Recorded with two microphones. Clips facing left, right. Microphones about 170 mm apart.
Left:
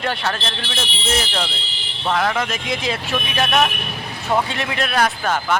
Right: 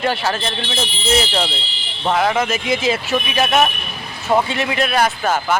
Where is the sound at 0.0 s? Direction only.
5° right (ahead or behind).